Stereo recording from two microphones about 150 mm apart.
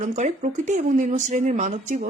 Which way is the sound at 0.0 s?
55° right (ahead or behind).